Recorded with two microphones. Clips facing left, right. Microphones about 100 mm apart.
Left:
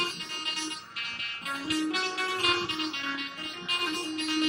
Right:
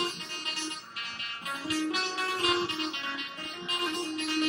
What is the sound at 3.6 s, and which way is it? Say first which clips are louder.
Music: right 1 dB; 35° right (ahead or behind).